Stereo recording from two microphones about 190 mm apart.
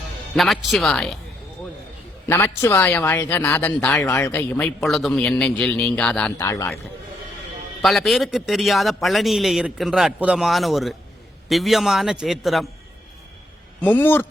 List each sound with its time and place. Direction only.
0.3 s a man's voice: centre (ahead or behind)
2.2 s a woman's voice: 10° left (ahead or behind)
6.4 s speech: 15° left (ahead or behind)
7.8 s a man's voice: centre (ahead or behind)
13.8 s speech: 10° left (ahead or behind)